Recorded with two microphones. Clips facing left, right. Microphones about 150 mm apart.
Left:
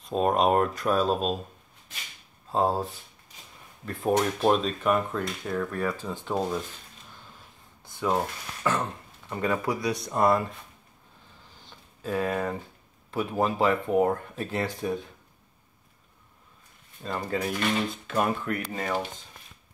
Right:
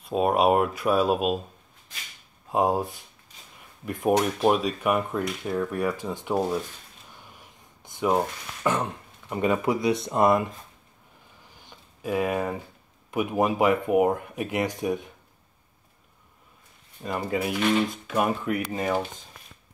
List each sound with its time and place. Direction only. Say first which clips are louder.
0.0 s speech: right 2 dB; 10° right (ahead or behind)
2.5 s speech: right 2 dB; 15° right (ahead or behind)
7.2 s a sound: right 1 dB; 15° right (ahead or behind)
8.6 s speech: right 2 dB; 20° right (ahead or behind)
11.5 s a sound: right 1 dB; 15° right (ahead or behind)
13.1 s speech: right 3 dB; 15° right (ahead or behind)
17.0 s speech: right 2 dB; 15° right (ahead or behind)